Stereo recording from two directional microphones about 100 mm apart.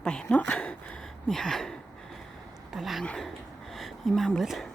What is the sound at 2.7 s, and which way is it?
Speech, centre (ahead or behind).